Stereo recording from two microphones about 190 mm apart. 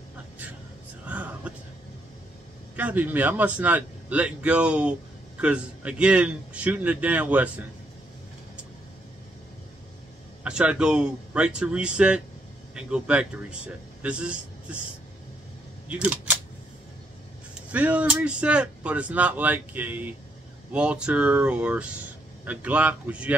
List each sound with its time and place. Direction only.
1.0 s whispering: 10° right (ahead or behind)
2.7 s speech: 10° right (ahead or behind)
10.4 s a man's voice: 5° right (ahead or behind)
15.9 s speech: 5° right (ahead or behind)
17.6 s speech: 5° right (ahead or behind)